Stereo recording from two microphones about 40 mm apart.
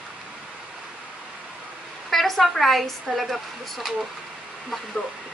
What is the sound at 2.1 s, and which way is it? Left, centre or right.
A woman's voice, centre.